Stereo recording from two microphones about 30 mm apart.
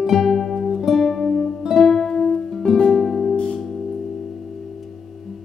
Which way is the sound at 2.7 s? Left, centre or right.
Left.